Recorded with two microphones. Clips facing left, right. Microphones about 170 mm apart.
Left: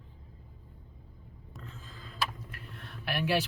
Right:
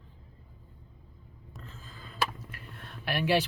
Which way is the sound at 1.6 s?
Centre (ahead or behind).